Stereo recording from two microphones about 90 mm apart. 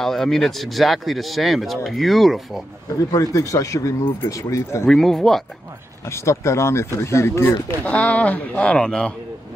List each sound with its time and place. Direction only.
0.0 s speech: 5° left (ahead or behind)
2.9 s speech: 40° left (ahead or behind)
4.8 s speech: 5° left (ahead or behind)
6.0 s speech: 30° left (ahead or behind)
7.8 s speech: 15° left (ahead or behind)